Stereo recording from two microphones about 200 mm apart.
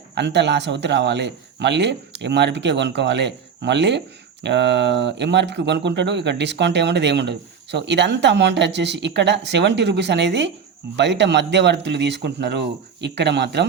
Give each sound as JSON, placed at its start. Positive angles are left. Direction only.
{"t": 0.1, "sound": "speech", "side_deg": -60}